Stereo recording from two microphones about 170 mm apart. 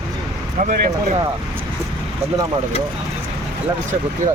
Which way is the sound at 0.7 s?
45° right (ahead or behind).